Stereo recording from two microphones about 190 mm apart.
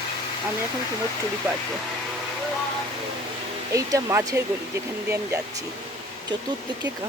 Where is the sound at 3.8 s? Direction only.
15° right (ahead or behind).